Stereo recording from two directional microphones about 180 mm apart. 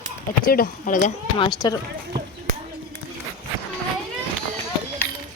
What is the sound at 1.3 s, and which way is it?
Speech, 25° left (ahead or behind).